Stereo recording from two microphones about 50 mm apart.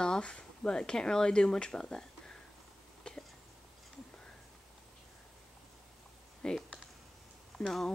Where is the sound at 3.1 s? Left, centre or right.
Centre.